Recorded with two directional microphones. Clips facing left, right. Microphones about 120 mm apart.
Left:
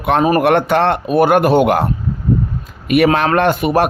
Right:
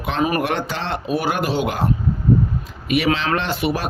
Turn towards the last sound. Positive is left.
turn(degrees=50)  # may be behind; listen again after turning